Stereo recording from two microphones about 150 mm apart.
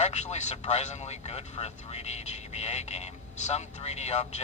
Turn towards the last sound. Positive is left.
turn(degrees=45)  # may be behind; listen again after turning